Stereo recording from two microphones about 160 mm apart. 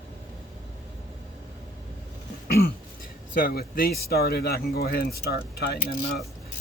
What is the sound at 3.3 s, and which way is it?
Speech, 60° left (ahead or behind).